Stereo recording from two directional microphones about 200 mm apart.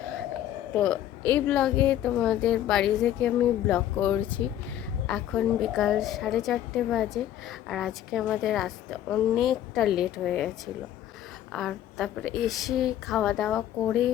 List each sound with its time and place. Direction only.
1.3 s a woman's voice: 5° left (ahead or behind)
11.5 s a woman's voice: centre (ahead or behind)